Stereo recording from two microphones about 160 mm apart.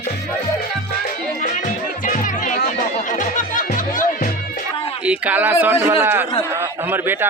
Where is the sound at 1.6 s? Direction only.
55° left (ahead or behind).